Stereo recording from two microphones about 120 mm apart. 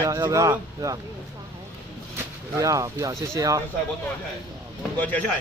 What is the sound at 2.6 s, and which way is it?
Speech, 25° right (ahead or behind).